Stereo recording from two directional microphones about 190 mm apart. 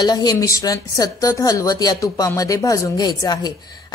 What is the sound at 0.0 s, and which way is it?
A woman's voice, 20° left (ahead or behind).